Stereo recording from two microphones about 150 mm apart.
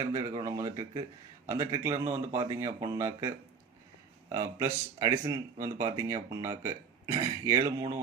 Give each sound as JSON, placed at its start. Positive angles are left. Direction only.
{"t": 0.0, "sound": "speech", "side_deg": -25}